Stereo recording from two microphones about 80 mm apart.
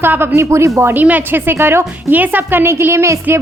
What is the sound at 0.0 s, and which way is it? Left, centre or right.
Speech, right.